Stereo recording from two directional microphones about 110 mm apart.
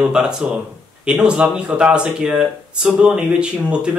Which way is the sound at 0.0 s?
5° right (ahead or behind).